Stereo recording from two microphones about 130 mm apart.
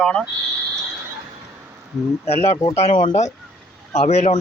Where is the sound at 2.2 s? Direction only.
50° left (ahead or behind).